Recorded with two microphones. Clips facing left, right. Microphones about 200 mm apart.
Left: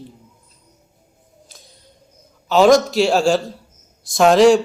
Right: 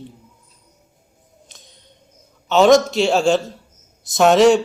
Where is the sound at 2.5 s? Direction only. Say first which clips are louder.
Even; centre (ahead or behind).